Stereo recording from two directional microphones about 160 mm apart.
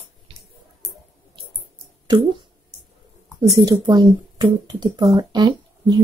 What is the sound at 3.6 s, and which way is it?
A woman's voice, 25° right (ahead or behind).